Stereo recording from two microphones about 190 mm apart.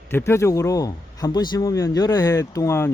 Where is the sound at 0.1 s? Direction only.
15° left (ahead or behind).